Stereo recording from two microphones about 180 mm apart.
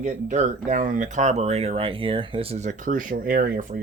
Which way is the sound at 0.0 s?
40° right (ahead or behind).